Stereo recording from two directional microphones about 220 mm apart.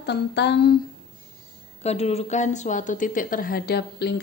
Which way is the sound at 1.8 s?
30° left (ahead or behind).